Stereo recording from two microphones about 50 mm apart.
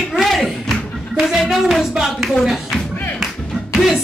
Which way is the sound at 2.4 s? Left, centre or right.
Centre.